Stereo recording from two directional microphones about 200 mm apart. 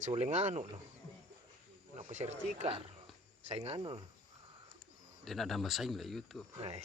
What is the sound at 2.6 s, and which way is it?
Speech, 30° right (ahead or behind).